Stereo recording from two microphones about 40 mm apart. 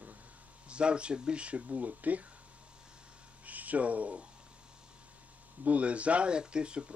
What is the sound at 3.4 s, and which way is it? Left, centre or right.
Speech, right.